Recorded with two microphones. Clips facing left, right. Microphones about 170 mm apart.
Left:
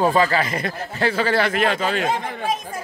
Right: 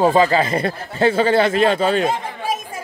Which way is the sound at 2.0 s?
10° right (ahead or behind).